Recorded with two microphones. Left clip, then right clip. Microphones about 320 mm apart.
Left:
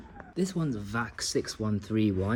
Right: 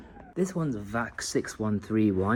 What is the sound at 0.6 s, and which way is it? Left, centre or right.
Speech, centre.